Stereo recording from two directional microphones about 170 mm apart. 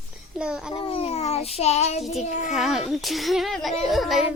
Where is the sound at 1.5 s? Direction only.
40° left (ahead or behind).